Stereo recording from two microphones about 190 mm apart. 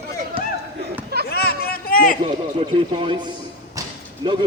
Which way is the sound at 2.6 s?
25° right (ahead or behind).